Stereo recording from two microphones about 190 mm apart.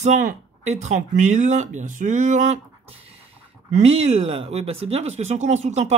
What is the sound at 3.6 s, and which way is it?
Speech, 35° right (ahead or behind).